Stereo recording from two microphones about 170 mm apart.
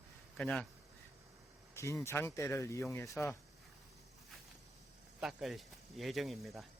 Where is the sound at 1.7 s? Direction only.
15° left (ahead or behind).